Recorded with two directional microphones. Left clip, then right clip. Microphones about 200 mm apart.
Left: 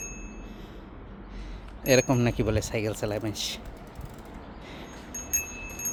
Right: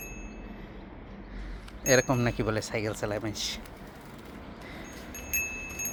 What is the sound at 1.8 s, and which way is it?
Speech, 35° left (ahead or behind).